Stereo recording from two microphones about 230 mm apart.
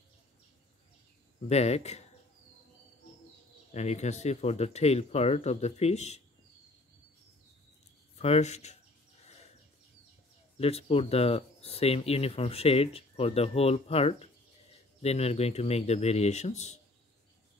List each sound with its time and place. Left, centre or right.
1.5 s speech: left
3.7 s speech: left
8.2 s speech: left
10.6 s speech: left